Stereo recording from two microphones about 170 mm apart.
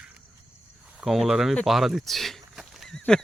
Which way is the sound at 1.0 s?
Centre (ahead or behind).